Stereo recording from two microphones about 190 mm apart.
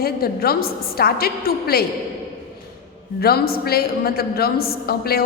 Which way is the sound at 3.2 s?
55° left (ahead or behind).